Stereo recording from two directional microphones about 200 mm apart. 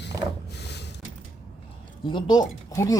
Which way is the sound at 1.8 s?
25° left (ahead or behind).